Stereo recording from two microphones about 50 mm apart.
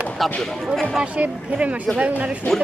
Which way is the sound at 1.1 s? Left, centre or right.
Right.